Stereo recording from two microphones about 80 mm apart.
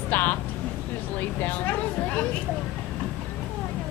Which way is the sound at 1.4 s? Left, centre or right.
Left.